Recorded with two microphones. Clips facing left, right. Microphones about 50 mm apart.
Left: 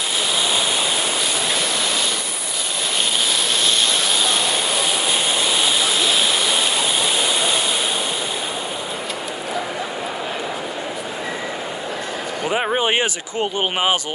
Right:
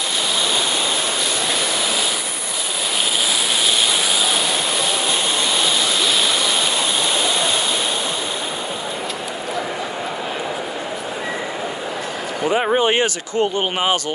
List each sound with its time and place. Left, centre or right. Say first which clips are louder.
5.6 s waterfall: even; centre
7.2 s a sound: right 1 dB; centre
12.7 s speech: right 2 dB; centre